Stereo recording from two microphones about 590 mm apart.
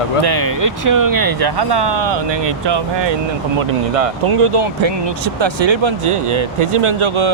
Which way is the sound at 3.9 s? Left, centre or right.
Right.